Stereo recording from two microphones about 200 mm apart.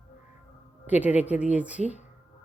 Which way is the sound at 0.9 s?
10° right (ahead or behind).